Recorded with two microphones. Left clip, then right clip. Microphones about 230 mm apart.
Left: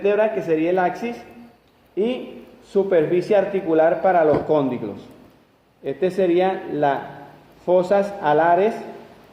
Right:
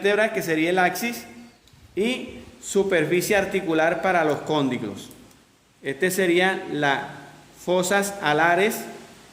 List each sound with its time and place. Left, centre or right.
0.0 s speech: right
2.7 s speech: right
5.8 s speech: right